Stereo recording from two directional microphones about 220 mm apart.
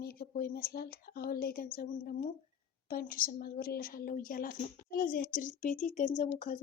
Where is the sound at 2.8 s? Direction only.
40° left (ahead or behind).